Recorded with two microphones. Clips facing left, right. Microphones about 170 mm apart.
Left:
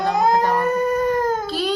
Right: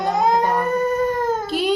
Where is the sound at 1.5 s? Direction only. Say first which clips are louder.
Right 2 dB; 20° right (ahead or behind).